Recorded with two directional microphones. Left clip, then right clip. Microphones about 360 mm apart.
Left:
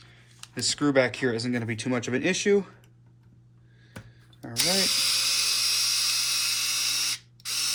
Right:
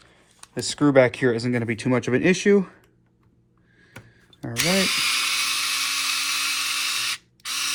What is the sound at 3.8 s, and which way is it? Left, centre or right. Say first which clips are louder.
Drill: right 2 dB; centre.